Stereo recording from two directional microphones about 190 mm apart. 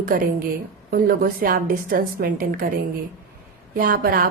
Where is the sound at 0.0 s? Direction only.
45° right (ahead or behind).